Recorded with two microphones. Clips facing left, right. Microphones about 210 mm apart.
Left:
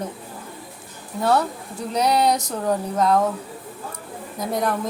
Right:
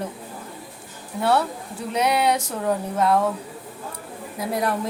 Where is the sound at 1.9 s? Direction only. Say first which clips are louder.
Left 1 dB; 35° left (ahead or behind).